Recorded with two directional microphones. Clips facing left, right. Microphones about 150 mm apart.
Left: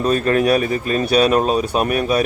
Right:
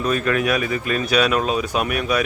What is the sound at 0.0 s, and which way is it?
Speech, 35° left (ahead or behind).